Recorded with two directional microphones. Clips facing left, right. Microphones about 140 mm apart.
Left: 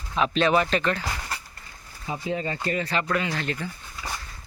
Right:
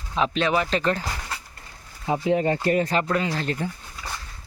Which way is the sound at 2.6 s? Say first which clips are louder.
Right 5 dB; 45° right (ahead or behind).